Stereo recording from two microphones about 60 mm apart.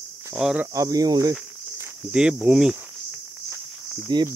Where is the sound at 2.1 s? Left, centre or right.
Centre.